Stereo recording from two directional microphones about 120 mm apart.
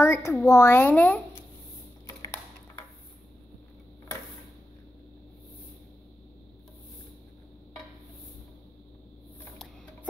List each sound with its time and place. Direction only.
0.0 s speech: 20° left (ahead or behind)
2.0 s typing: 25° left (ahead or behind)